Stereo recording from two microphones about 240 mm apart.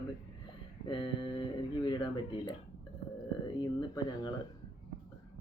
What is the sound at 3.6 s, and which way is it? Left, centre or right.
Speech, centre.